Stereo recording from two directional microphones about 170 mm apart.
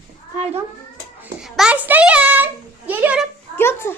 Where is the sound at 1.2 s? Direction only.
Centre (ahead or behind).